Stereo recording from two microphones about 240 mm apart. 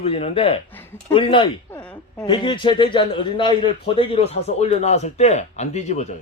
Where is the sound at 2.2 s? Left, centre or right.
Centre.